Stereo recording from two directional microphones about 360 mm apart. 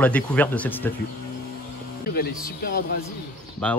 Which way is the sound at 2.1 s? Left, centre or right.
Left.